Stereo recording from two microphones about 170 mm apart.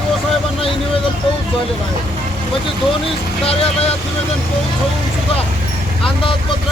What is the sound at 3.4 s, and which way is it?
Speech, 35° left (ahead or behind).